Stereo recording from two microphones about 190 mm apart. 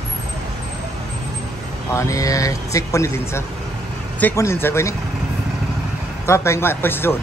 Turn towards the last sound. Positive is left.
turn(degrees=10)  # may be behind; listen again after turning